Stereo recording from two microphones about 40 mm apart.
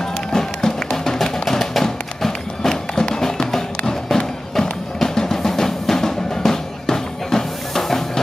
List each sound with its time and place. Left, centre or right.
0.3 s music: centre